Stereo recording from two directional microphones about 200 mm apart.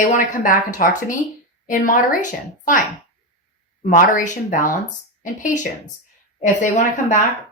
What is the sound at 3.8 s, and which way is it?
Speech, 40° left (ahead or behind).